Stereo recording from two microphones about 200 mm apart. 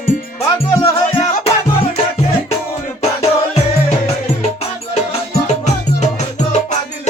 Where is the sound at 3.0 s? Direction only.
35° left (ahead or behind).